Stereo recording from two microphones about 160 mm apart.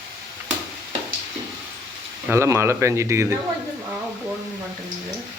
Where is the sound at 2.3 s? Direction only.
15° right (ahead or behind).